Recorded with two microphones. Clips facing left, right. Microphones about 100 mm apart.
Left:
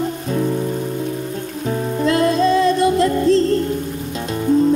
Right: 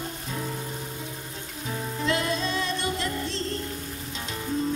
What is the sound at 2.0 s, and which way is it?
Music, 40° left (ahead or behind).